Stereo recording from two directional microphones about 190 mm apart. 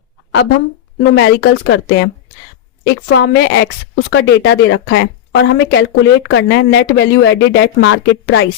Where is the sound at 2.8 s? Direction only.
60° left (ahead or behind).